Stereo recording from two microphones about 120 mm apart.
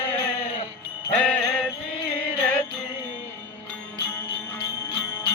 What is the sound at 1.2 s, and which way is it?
Jingle bell, 10° left (ahead or behind).